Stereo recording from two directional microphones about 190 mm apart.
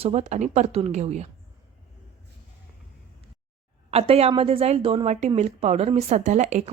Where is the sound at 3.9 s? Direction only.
30° right (ahead or behind).